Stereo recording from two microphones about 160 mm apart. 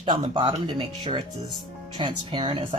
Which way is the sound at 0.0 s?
35° right (ahead or behind).